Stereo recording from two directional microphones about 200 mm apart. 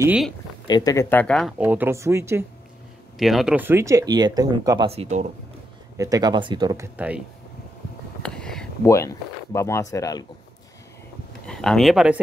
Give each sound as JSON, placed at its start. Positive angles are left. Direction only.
{"t": 0.0, "sound": "speech", "side_deg": -5}
{"t": 0.7, "sound": "speech", "side_deg": 20}
{"t": 1.6, "sound": "speech", "side_deg": -10}
{"t": 3.2, "sound": "speech", "side_deg": 0}
{"t": 5.9, "sound": "speech", "side_deg": -15}
{"t": 7.0, "sound": "speech", "side_deg": -5}
{"t": 8.2, "sound": "a sound", "side_deg": 5}
{"t": 8.8, "sound": "speech", "side_deg": 15}
{"t": 11.4, "sound": "speech", "side_deg": 5}